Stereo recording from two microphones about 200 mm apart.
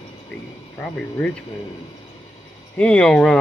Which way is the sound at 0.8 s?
5° left (ahead or behind).